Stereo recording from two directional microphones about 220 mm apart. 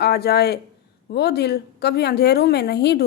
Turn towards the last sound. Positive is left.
turn(degrees=50)  # may be behind; listen again after turning